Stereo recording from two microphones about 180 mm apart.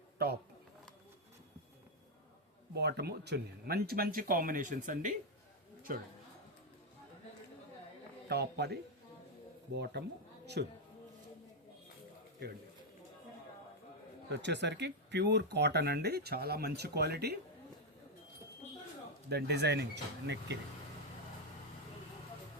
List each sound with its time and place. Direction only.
2.7 s speech: 65° right (ahead or behind); by 5.1 s 45° right (ahead or behind)
8.3 s speech: 65° right (ahead or behind)
14.3 s speech: 75° right (ahead or behind)
19.3 s speech: 65° right (ahead or behind)